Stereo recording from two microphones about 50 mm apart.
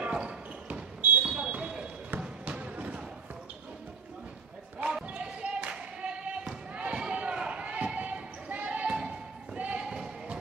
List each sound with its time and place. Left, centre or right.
0.0 s basketball bounce: right
5.0 s a sound: right
6.9 s basketball bounce: centre